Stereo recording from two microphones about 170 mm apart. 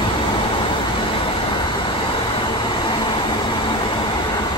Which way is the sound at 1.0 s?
30° left (ahead or behind).